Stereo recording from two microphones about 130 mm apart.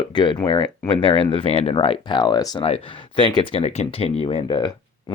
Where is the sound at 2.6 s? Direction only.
45° left (ahead or behind).